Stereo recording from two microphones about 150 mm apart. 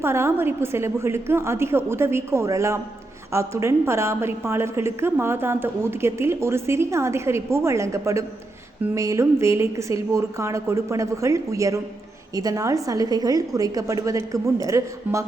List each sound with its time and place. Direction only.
0.0 s a woman's voice: 15° right (ahead or behind)